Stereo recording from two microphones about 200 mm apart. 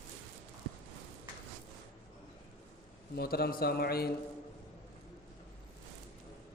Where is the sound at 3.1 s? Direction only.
50° left (ahead or behind).